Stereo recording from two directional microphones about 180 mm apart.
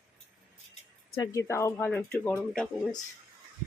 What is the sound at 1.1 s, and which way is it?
Speech, 15° left (ahead or behind).